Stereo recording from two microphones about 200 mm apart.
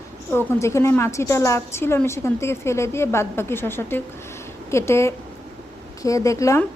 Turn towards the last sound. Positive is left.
turn(degrees=15)  # may be behind; listen again after turning